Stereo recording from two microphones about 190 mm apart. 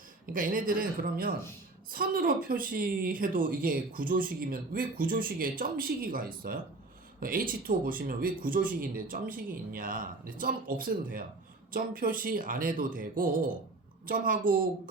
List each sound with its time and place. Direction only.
0.3 s speech: 45° right (ahead or behind)